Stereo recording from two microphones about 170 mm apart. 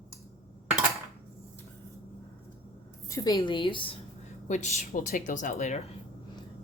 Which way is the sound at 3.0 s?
20° left (ahead or behind).